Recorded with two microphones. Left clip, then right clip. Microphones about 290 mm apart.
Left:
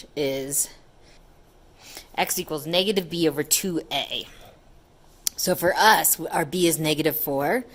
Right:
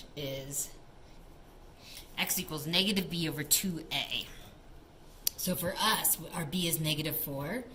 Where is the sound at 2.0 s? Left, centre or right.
Centre.